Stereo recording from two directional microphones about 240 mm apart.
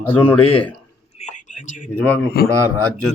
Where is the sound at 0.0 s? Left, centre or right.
Centre.